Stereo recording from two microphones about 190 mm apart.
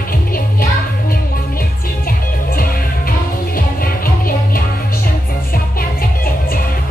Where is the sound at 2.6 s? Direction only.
50° left (ahead or behind).